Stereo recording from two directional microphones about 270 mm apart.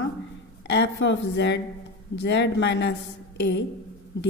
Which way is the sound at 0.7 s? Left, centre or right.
Left.